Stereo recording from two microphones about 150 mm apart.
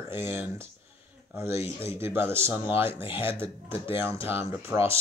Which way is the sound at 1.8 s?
15° right (ahead or behind).